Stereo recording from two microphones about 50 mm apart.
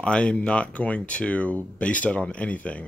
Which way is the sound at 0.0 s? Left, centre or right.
Left.